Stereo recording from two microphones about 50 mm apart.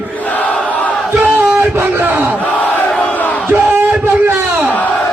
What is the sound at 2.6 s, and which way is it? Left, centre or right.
Crowd, left.